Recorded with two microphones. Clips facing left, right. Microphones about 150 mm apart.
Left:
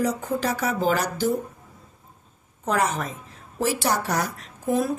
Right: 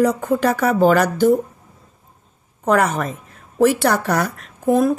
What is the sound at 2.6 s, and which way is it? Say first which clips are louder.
Speech: right 7 dB; 60° right (ahead or behind).